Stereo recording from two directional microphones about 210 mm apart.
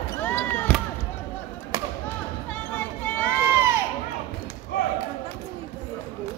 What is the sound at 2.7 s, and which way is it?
Run, 10° left (ahead or behind).